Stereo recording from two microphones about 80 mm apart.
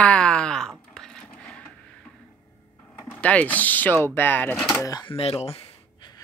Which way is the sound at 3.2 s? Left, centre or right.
Centre.